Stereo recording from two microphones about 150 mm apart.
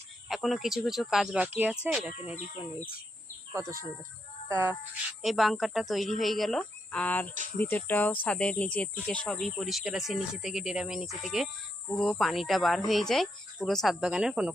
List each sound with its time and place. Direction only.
0.3 s speech: centre (ahead or behind)
3.5 s speech: 20° right (ahead or behind)
5.2 s speech: centre (ahead or behind)